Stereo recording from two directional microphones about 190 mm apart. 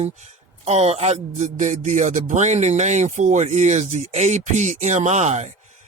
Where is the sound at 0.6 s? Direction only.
35° right (ahead or behind).